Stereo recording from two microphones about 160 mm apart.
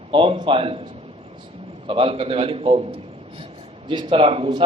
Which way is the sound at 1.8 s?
35° right (ahead or behind).